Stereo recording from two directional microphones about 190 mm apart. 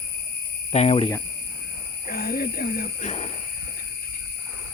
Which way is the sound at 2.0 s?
55° left (ahead or behind).